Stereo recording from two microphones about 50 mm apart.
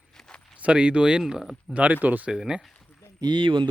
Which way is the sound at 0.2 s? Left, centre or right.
Centre.